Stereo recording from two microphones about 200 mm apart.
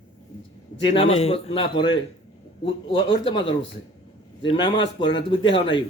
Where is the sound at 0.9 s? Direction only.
30° left (ahead or behind).